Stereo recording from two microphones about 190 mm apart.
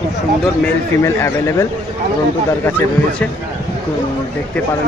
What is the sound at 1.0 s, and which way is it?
Speech, 15° left (ahead or behind).